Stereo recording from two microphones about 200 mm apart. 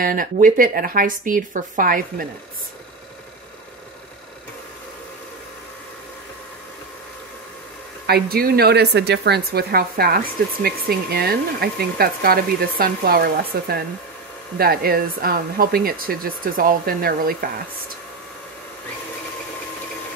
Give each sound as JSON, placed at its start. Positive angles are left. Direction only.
{"t": 0.0, "sound": "speech", "side_deg": -45}
{"t": 8.1, "sound": "speech", "side_deg": -50}